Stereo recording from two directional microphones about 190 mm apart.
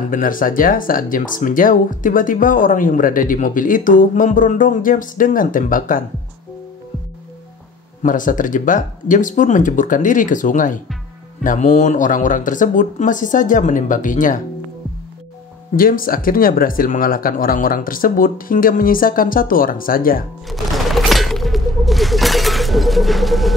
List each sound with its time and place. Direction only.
0.1 s speech: 45° left (ahead or behind)
8.0 s speech: 45° left (ahead or behind)
15.7 s speech: 50° left (ahead or behind)
20.4 s a sound: centre (ahead or behind)